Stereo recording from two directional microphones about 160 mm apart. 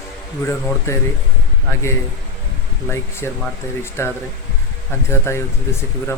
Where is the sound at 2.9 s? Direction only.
15° left (ahead or behind).